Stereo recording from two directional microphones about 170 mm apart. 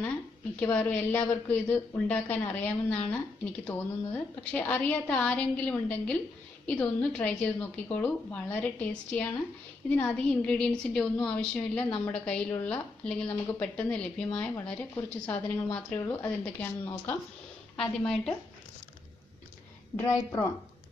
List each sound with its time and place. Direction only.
0.6 s a woman's voice: 10° left (ahead or behind)
20.0 s speech: 20° left (ahead or behind)